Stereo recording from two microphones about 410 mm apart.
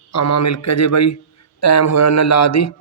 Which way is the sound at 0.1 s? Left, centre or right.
Left.